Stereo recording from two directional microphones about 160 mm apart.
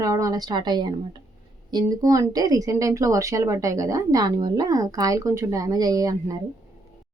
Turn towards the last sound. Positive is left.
turn(degrees=-20)  # may be behind; listen again after turning